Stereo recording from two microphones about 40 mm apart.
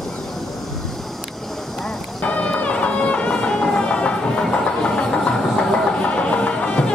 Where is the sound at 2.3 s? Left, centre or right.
Left.